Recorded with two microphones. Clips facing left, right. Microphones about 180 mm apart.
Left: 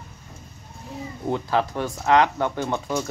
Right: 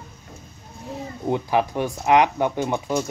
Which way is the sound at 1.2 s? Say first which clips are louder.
Right 2 dB; 15° right (ahead or behind).